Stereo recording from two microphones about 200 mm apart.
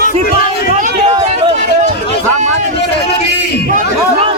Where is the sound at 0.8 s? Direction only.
35° right (ahead or behind).